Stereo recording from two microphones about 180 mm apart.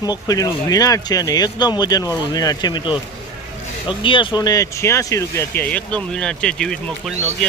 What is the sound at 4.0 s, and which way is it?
Speech, 30° left (ahead or behind).